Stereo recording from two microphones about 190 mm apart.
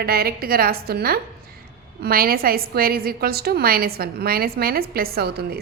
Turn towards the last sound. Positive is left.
turn(degrees=-55)  # may be behind; listen again after turning